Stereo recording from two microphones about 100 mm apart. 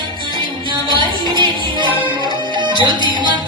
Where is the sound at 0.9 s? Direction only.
50° right (ahead or behind).